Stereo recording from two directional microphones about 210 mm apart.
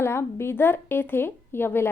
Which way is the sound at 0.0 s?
10° left (ahead or behind).